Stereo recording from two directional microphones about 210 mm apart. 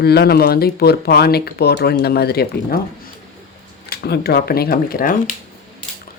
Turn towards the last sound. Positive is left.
turn(degrees=45)  # may be behind; listen again after turning